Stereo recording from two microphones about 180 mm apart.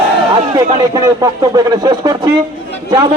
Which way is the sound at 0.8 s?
20° right (ahead or behind).